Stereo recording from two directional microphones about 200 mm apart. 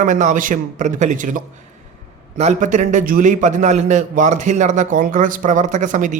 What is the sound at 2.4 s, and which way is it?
A man's voice, 35° right (ahead or behind).